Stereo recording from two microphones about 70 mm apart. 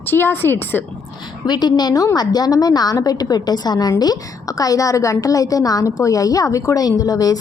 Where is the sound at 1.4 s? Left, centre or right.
Left.